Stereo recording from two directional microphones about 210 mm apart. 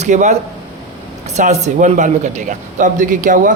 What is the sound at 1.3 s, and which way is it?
Speech, 35° right (ahead or behind).